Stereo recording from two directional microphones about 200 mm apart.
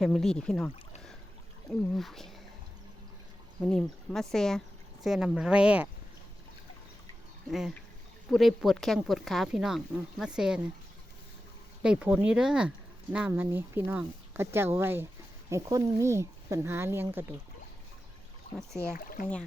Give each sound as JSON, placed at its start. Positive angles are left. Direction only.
{"t": 0.0, "sound": "speech", "side_deg": 0}
{"t": 3.6, "sound": "speech", "side_deg": 5}
{"t": 8.3, "sound": "speech", "side_deg": 0}
{"t": 11.8, "sound": "speech", "side_deg": -5}
{"t": 18.9, "sound": "speech", "side_deg": 45}